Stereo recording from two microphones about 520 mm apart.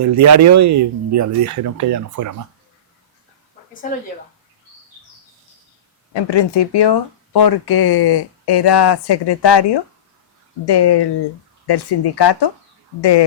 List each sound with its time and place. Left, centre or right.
0.0 s speech: right
6.1 s speech: left